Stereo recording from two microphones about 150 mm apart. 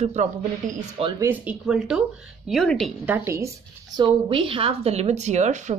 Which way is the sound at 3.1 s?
15° right (ahead or behind).